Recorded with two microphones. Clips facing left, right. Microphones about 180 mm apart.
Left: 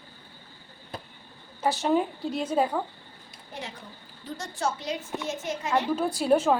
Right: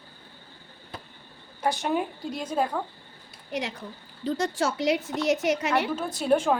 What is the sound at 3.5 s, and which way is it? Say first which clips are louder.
A woman's voice: right 8 dB; 90° right.